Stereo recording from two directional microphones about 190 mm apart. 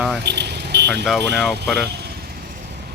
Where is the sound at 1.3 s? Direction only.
5° right (ahead or behind).